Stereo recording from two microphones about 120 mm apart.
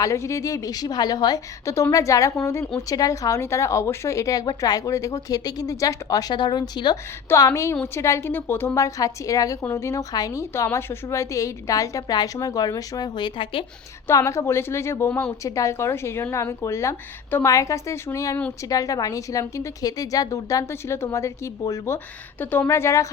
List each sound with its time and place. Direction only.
0.0 s a woman's voice: 25° left (ahead or behind)
6.9 s a woman's voice: 25° left (ahead or behind); by 13.7 s 45° left (ahead or behind)
14.1 s a woman's voice: 25° left (ahead or behind)
21.9 s a woman's voice: 15° left (ahead or behind)